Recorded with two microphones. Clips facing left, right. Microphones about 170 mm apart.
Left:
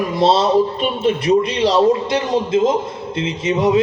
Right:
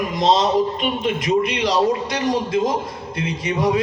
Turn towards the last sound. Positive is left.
turn(degrees=25)  # may be behind; listen again after turning